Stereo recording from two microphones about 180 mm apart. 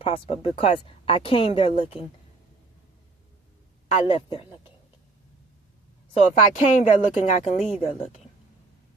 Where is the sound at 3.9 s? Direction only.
35° left (ahead or behind).